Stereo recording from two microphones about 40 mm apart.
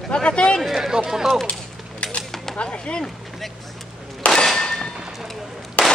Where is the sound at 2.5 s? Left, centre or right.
Left.